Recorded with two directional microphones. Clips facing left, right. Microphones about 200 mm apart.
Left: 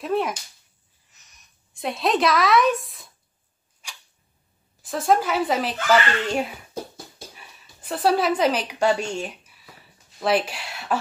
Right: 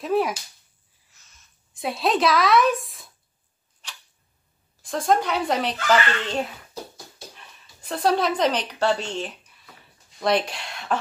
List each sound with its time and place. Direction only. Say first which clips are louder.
0.0 s speech: right 2 dB; centre (ahead or behind)
1.1 s a sound: left 1 dB; 15° left (ahead or behind)
1.7 s a woman's voice: even; centre (ahead or behind)
3.8 s camera: even; 10° left (ahead or behind)
4.8 s speech: left 1 dB; 5° left (ahead or behind)